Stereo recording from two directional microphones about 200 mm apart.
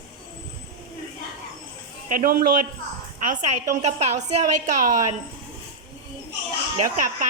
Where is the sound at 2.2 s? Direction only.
45° right (ahead or behind).